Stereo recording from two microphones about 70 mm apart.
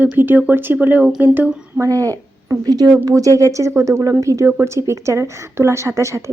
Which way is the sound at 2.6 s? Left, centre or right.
Right.